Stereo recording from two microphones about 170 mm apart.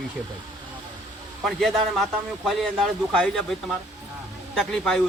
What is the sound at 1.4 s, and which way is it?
Speech, centre (ahead or behind).